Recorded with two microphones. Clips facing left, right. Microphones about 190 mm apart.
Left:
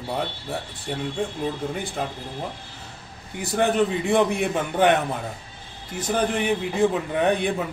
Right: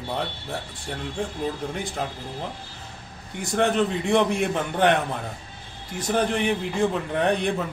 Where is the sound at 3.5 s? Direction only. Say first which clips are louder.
Left 1 dB; 5° left (ahead or behind).